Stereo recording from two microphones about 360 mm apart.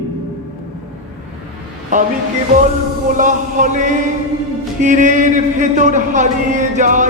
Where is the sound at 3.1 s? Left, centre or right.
Right.